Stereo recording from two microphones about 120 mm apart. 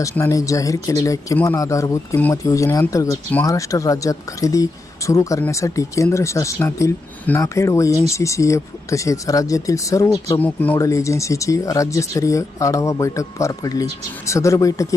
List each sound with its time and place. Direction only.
0.0 s speech: 25° left (ahead or behind)
10.3 s speech: 15° left (ahead or behind)
10.8 s speech: 25° left (ahead or behind)